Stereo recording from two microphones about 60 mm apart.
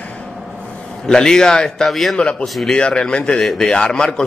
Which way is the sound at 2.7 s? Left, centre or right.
Centre.